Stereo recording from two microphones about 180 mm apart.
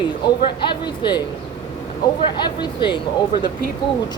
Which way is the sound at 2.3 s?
25° left (ahead or behind).